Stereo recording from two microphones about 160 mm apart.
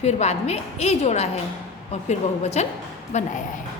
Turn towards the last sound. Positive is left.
turn(degrees=45)  # may be behind; listen again after turning